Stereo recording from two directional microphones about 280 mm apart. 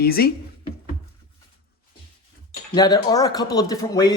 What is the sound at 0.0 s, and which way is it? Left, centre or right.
Speech, left.